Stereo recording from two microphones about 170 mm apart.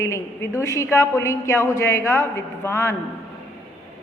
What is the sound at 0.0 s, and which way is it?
A woman's voice, 15° left (ahead or behind).